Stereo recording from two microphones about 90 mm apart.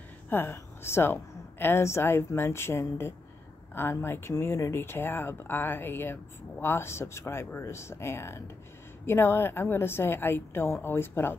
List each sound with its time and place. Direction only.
0.3 s a woman's voice: 25° left (ahead or behind)